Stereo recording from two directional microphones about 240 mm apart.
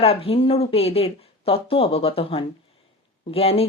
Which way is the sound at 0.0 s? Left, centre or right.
Left.